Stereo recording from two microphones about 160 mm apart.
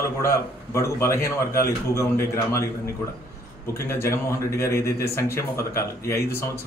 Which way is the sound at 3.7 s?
15° left (ahead or behind).